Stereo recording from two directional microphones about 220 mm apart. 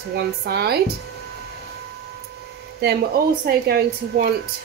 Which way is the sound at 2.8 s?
50° right (ahead or behind).